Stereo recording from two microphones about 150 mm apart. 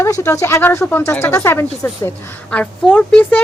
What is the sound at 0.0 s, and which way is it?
Speech, 20° left (ahead or behind).